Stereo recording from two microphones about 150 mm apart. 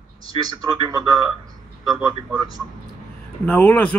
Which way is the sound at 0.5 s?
25° right (ahead or behind).